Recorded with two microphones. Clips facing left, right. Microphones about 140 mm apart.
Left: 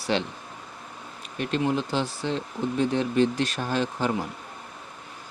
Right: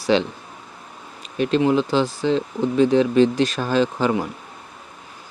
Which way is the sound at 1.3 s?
90° right.